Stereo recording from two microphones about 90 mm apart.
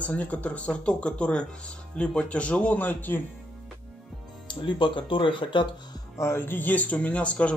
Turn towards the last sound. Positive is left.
turn(degrees=15)  # may be behind; listen again after turning